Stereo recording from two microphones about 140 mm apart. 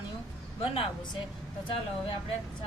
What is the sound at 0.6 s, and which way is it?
Speech, 40° left (ahead or behind).